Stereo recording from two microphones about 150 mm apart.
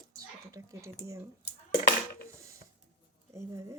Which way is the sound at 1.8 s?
80° left.